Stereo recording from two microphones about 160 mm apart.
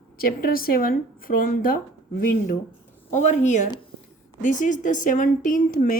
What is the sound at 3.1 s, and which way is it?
A woman's voice, 50° left (ahead or behind).